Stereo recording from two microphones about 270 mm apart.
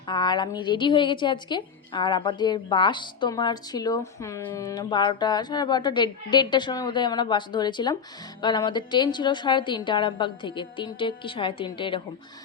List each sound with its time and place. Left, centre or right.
0.1 s a woman's voice: centre